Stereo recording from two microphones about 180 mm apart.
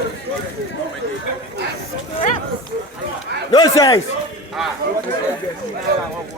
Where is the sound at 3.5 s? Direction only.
20° left (ahead or behind).